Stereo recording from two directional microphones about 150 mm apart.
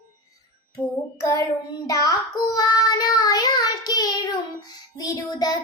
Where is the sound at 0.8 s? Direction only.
20° left (ahead or behind).